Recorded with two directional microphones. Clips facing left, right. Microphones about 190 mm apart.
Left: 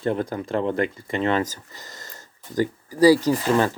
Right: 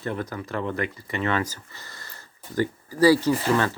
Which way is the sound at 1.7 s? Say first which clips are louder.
Left 3 dB; 20° left (ahead or behind).